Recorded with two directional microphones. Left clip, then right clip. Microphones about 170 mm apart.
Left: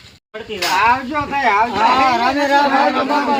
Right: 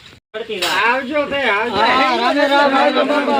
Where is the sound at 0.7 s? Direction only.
10° left (ahead or behind).